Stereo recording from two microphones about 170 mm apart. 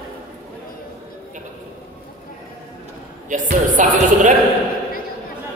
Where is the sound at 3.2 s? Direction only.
50° right (ahead or behind).